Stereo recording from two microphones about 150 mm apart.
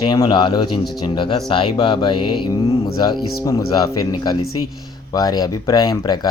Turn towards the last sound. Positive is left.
turn(degrees=25)  # may be behind; listen again after turning